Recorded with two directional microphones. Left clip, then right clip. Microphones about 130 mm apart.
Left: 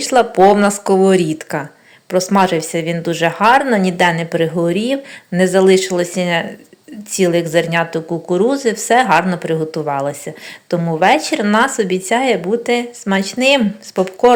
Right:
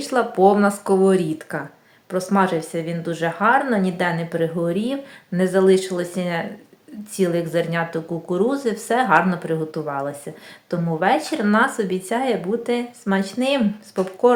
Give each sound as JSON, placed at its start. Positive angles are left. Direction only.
{"t": 0.0, "sound": "a woman's voice", "side_deg": 25}